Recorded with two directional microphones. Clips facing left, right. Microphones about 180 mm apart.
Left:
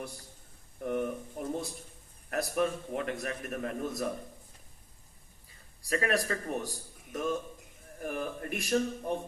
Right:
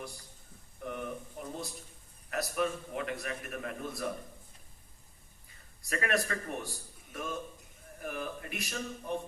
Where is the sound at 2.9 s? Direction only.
40° left (ahead or behind).